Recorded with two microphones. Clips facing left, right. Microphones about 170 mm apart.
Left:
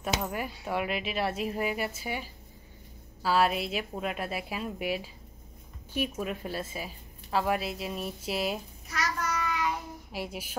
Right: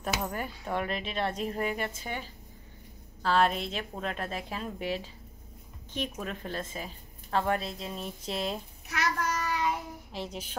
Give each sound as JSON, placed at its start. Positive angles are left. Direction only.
{"t": 0.2, "sound": "a woman's voice", "side_deg": 5}
{"t": 8.8, "sound": "child singing", "side_deg": -65}
{"t": 9.4, "sound": "child singing", "side_deg": -35}
{"t": 10.1, "sound": "a woman's voice", "side_deg": 10}